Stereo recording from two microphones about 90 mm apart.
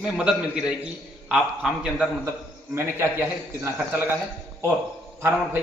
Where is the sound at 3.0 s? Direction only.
25° right (ahead or behind).